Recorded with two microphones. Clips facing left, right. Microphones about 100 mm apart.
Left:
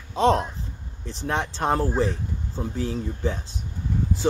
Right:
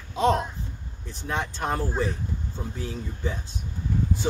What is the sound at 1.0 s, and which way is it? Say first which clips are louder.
Speech: left 7 dB; 90° left.